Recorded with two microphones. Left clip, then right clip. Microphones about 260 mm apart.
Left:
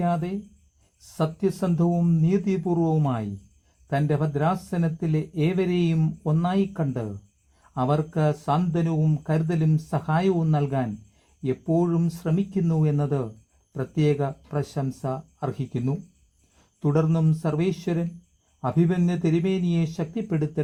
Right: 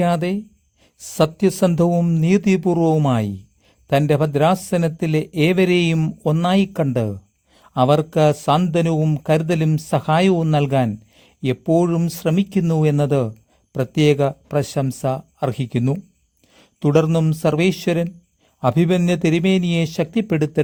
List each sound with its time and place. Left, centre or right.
0.0 s speech: right